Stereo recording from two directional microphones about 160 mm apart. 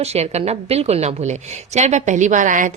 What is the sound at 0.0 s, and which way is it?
A woman's voice, 40° right (ahead or behind).